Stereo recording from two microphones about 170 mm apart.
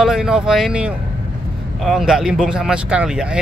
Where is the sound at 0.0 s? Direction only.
5° right (ahead or behind).